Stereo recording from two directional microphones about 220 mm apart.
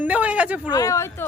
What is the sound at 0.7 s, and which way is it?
Speech, 15° left (ahead or behind).